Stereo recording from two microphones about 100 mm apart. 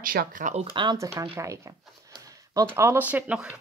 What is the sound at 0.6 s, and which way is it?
Speech, 50° right (ahead or behind).